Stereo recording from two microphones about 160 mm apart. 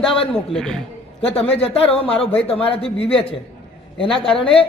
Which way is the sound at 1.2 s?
35° left (ahead or behind).